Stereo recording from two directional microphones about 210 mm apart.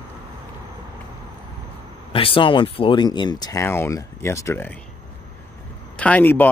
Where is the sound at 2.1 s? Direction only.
25° left (ahead or behind).